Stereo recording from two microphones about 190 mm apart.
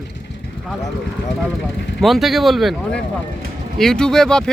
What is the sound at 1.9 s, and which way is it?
Speech, centre (ahead or behind).